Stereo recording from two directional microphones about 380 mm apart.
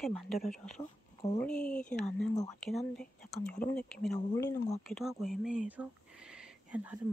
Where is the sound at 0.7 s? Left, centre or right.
Centre.